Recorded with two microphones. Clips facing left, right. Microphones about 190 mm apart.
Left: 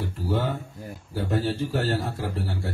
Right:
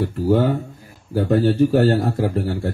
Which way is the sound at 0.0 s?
50° right (ahead or behind).